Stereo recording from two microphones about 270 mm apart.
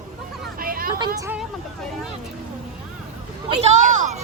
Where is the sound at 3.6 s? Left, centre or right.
Right.